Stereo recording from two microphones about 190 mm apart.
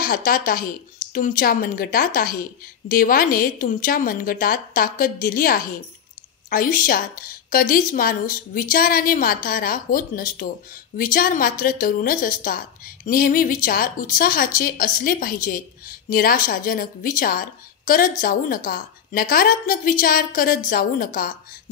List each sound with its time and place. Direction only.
0.0 s a woman's voice: 50° left (ahead or behind)